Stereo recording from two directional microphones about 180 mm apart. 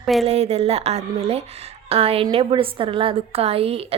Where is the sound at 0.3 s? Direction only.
35° right (ahead or behind).